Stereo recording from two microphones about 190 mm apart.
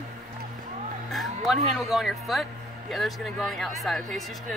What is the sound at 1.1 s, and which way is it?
Speech, centre (ahead or behind).